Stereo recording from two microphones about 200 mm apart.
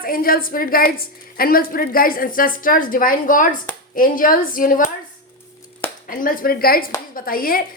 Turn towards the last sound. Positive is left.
turn(degrees=45)  # may be behind; listen again after turning